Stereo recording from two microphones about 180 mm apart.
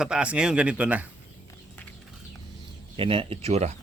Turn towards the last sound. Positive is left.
turn(degrees=-40)  # may be behind; listen again after turning